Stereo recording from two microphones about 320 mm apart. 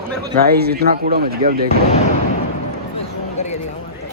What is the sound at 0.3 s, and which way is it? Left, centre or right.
Speech, right.